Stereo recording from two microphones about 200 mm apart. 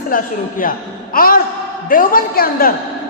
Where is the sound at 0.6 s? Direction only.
45° left (ahead or behind).